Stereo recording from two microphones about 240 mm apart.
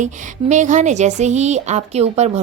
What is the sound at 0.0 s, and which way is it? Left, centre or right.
A woman's voice, right.